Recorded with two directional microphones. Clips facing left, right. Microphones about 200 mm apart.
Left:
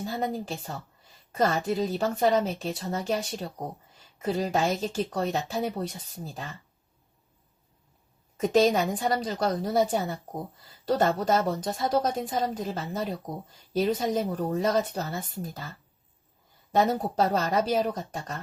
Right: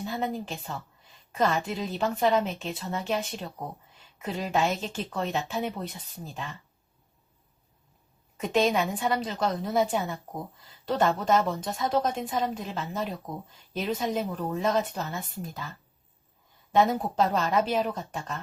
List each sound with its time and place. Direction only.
0.0 s a sound: 40° left (ahead or behind)
0.4 s speech: 40° left (ahead or behind)
8.4 s speech: 40° left (ahead or behind)
16.7 s speech: 40° left (ahead or behind)